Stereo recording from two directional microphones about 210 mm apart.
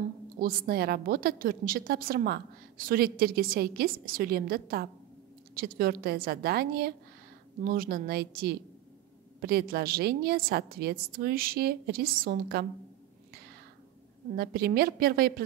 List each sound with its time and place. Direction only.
0.4 s a woman's voice: 45° right (ahead or behind)
14.3 s a woman's voice: 45° right (ahead or behind)